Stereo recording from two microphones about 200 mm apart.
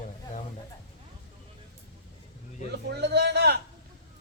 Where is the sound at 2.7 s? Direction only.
55° right (ahead or behind).